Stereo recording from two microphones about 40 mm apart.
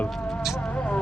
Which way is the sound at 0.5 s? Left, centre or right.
Left.